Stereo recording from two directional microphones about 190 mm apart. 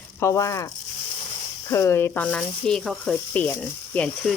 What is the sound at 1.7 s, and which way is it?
A woman's voice, 15° left (ahead or behind).